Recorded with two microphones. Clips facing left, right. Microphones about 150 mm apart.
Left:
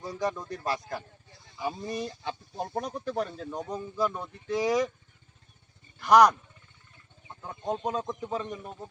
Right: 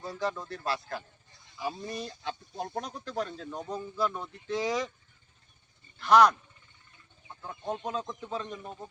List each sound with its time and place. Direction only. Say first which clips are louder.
0.0 s speech: left 2 dB; 15° left (ahead or behind)
2.6 s speech: left 5 dB; 5° left (ahead or behind)
6.0 s speech: left 2 dB; 15° left (ahead or behind)
7.5 s speech: left 3 dB; 15° left (ahead or behind)